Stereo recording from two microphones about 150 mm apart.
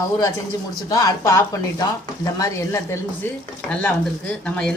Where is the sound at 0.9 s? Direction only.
25° left (ahead or behind).